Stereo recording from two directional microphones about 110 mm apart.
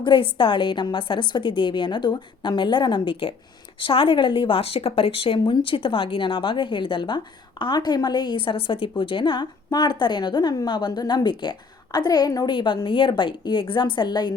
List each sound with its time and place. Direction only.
0.0 s a woman's voice: 50° left (ahead or behind)